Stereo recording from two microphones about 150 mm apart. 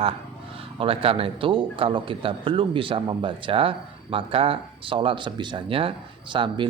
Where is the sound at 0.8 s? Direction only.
35° right (ahead or behind).